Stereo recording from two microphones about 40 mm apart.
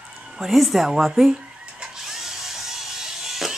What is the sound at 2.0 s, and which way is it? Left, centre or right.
Tools, centre.